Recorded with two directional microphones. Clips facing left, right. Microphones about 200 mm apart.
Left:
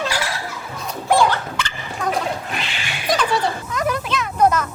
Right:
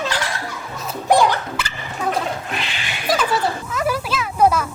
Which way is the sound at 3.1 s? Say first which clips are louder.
Even; 5° right (ahead or behind).